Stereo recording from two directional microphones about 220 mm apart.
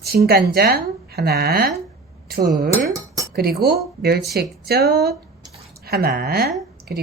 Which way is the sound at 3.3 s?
45° right (ahead or behind).